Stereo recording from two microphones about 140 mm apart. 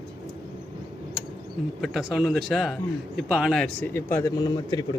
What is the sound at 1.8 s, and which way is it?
Speech, 5° right (ahead or behind).